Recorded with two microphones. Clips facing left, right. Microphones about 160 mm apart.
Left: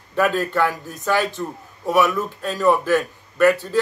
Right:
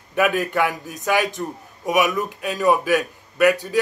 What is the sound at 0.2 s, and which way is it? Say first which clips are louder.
A man's voice: even; 15° right (ahead or behind).